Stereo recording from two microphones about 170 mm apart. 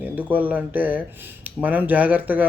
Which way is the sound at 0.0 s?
10° right (ahead or behind).